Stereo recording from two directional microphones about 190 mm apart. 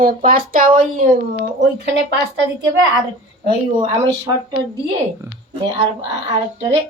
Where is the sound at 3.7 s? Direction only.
25° right (ahead or behind).